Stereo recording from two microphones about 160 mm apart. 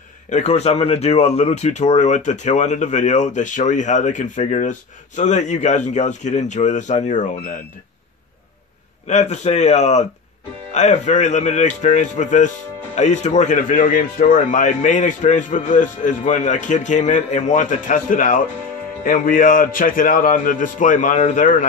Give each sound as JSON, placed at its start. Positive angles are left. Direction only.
{"t": 0.3, "sound": "speech", "side_deg": 45}
{"t": 9.0, "sound": "a man's voice", "side_deg": 45}